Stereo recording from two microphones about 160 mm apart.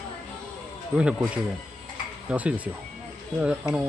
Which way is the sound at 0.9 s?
5° right (ahead or behind).